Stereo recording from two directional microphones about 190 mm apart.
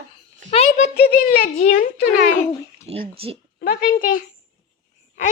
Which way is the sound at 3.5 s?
50° left (ahead or behind).